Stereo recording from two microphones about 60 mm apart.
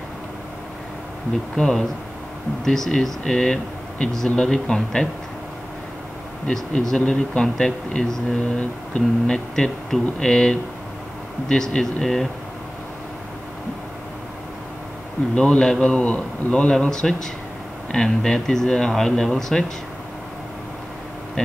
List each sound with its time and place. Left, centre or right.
1.5 s speech: centre
6.5 s speech: centre
15.3 s speech: centre
21.4 s speech: centre